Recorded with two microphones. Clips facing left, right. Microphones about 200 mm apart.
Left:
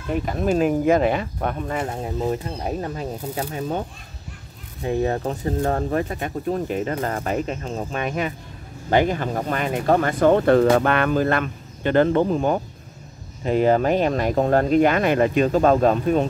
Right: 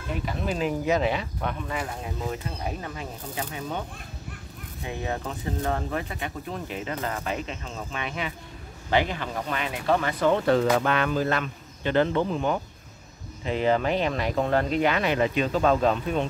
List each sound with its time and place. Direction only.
0.2 s speech: 45° left (ahead or behind)
1.9 s speech: 35° left (ahead or behind)
4.8 s speech: 45° left (ahead or behind)